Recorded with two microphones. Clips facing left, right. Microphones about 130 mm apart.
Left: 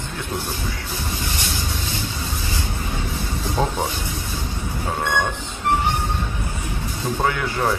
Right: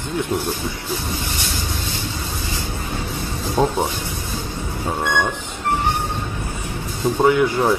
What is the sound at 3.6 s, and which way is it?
Speech, 15° right (ahead or behind).